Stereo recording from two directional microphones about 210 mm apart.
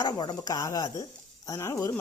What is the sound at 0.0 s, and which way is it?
Speech, 20° left (ahead or behind).